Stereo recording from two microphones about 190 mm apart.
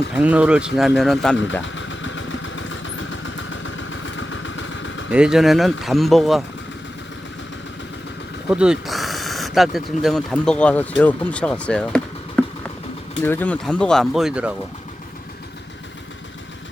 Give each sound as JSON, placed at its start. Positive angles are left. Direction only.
{"t": 0.1, "sound": "speech", "side_deg": -5}
{"t": 1.6, "sound": "vehicle", "side_deg": 80}
{"t": 5.1, "sound": "speech", "side_deg": -5}
{"t": 8.4, "sound": "speech", "side_deg": -5}